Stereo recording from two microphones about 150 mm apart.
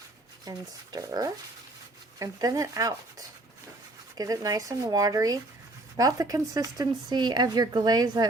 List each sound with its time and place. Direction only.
0.5 s speech: 25° right (ahead or behind)